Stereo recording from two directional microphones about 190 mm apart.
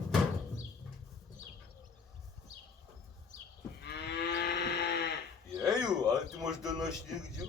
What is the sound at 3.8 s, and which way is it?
Moo, 60° left (ahead or behind).